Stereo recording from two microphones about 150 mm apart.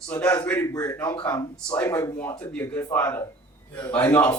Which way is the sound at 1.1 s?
10° left (ahead or behind).